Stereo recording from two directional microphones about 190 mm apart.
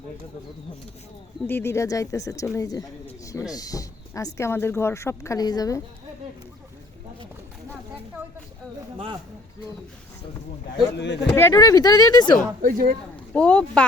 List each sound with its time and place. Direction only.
1.5 s a woman's voice: 10° left (ahead or behind)
10.9 s speech: 65° left (ahead or behind)
11.3 s speech: 15° left (ahead or behind)
12.6 s speech: 50° right (ahead or behind)
13.3 s speech: 5° left (ahead or behind)